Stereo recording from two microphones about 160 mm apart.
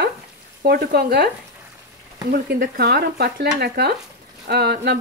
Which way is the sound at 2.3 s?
70° right (ahead or behind).